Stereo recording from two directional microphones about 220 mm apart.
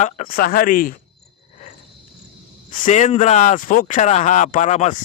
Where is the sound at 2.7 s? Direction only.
35° left (ahead or behind).